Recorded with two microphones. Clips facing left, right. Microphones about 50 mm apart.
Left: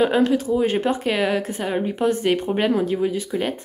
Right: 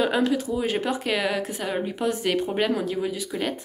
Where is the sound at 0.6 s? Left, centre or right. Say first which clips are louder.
Left 5 dB; centre.